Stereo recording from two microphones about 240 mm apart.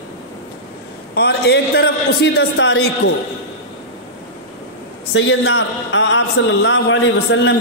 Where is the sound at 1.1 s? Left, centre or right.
Left.